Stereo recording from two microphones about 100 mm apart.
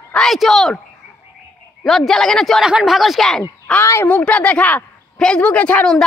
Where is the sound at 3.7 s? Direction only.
25° left (ahead or behind).